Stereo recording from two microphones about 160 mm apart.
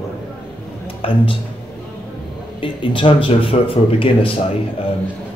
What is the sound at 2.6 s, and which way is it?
Speech, 30° left (ahead or behind).